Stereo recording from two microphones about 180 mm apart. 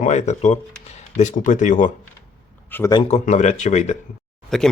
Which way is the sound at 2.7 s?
10° left (ahead or behind).